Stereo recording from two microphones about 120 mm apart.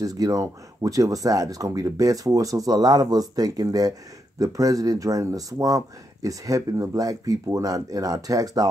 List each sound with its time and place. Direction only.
0.0 s speech: 30° right (ahead or behind)